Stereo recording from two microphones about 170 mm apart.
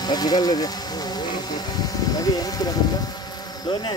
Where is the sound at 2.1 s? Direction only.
20° left (ahead or behind).